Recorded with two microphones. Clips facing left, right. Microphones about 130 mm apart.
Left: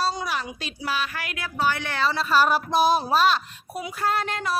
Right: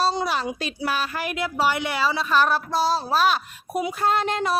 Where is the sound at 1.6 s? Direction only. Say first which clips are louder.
Even; 15° right (ahead or behind).